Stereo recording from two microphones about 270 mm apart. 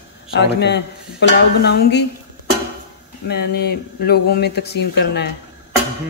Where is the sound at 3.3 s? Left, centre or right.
Left.